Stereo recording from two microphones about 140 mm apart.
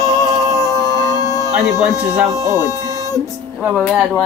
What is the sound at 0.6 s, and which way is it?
Music, 25° left (ahead or behind).